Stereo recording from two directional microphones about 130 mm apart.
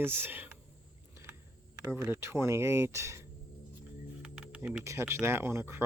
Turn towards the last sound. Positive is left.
turn(degrees=-20)  # may be behind; listen again after turning